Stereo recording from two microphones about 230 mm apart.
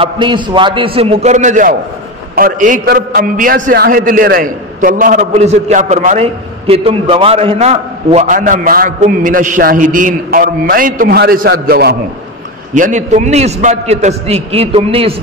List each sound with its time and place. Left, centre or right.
0.0 s a man's voice: right